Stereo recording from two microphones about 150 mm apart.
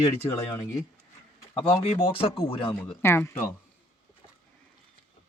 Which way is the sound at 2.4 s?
15° left (ahead or behind).